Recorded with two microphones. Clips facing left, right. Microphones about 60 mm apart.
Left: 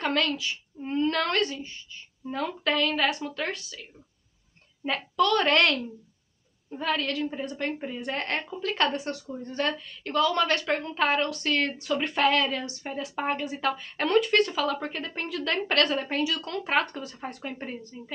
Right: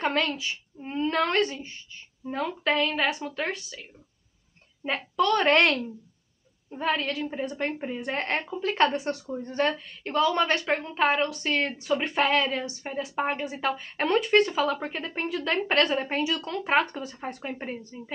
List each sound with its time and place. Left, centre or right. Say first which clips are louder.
0.0 s a child's voice: even; centre
6.8 s a woman's voice: right 1 dB; centre